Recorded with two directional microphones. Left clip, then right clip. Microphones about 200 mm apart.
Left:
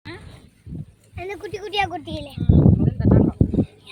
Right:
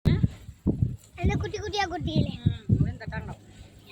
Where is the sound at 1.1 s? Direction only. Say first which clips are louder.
Left 2 dB; 40° left (ahead or behind).